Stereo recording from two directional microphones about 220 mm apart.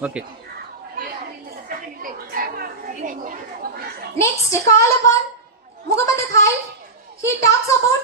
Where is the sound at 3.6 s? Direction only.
45° right (ahead or behind).